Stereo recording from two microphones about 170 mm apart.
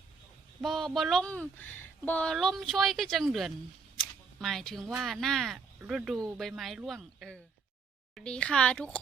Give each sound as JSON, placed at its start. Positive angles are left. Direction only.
{"t": 0.6, "sound": "speech", "side_deg": 0}